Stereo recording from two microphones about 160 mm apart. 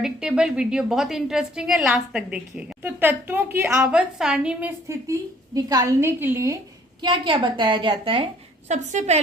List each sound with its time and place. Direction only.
0.0 s a woman's voice: 5° right (ahead or behind)
5.5 s a woman's voice: 20° right (ahead or behind)
7.0 s a woman's voice: 30° right (ahead or behind); by 9.2 s 45° right (ahead or behind)